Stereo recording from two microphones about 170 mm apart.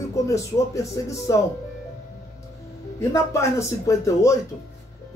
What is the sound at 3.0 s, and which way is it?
Speech, 15° left (ahead or behind).